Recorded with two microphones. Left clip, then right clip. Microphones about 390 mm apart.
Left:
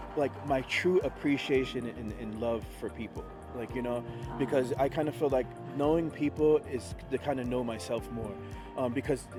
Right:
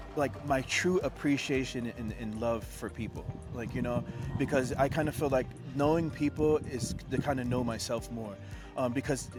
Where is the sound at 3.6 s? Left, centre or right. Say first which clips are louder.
Left 1 dB; right.